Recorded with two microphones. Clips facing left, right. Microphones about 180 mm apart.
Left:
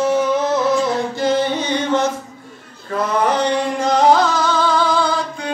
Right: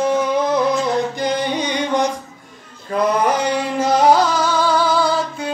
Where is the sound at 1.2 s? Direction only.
15° right (ahead or behind).